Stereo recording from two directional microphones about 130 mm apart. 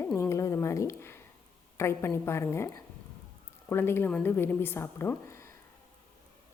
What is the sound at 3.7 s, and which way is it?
A woman's voice, 15° left (ahead or behind).